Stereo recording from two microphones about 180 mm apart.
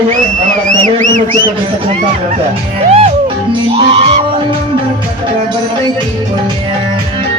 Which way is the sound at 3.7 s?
35° right (ahead or behind).